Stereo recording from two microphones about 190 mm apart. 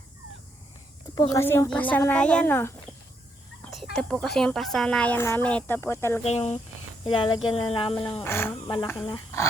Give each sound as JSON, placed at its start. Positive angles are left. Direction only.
{"t": 1.1, "sound": "speech", "side_deg": 20}
{"t": 3.7, "sound": "speech", "side_deg": 0}
{"t": 6.2, "sound": "speech", "side_deg": 35}
{"t": 8.2, "sound": "speech", "side_deg": 10}